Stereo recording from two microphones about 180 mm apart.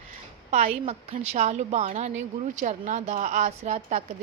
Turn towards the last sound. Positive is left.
turn(degrees=-40)  # may be behind; listen again after turning